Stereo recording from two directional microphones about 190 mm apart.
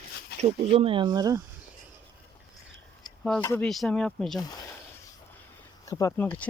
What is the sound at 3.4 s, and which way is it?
Speech, 10° left (ahead or behind).